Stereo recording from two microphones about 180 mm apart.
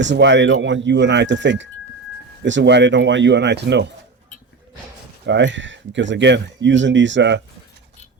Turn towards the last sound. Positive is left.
turn(degrees=-85)